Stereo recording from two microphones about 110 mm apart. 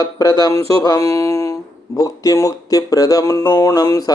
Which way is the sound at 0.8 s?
30° left (ahead or behind).